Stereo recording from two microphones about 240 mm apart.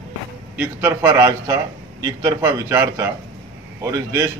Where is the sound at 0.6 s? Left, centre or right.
Centre.